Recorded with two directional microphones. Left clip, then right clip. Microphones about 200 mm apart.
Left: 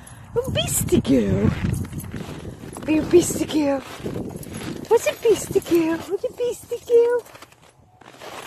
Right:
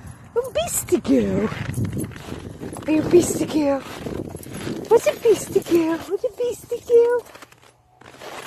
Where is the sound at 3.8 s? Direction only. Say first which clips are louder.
Even; 45° right (ahead or behind).